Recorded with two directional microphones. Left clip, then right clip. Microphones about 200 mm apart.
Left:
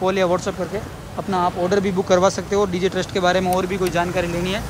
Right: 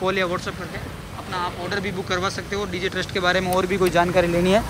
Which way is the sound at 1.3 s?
35° left (ahead or behind).